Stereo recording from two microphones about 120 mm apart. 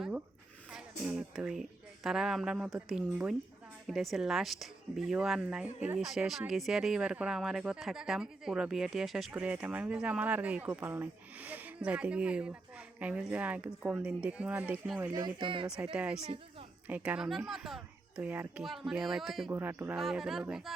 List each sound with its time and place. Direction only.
0.7 s speech: 5° right (ahead or behind)
15.1 s speech: 40° right (ahead or behind)
15.6 s speech: 5° right (ahead or behind)
16.2 s a sound: 50° right (ahead or behind)
16.8 s speech: 15° right (ahead or behind)
19.5 s speech: 20° right (ahead or behind)
20.0 s speech: centre (ahead or behind)